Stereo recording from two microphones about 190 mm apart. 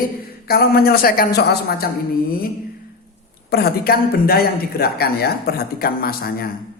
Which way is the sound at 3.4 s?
55° left (ahead or behind).